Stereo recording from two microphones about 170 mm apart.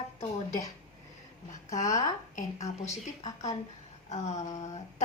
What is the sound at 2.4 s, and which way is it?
A woman's voice, 40° left (ahead or behind).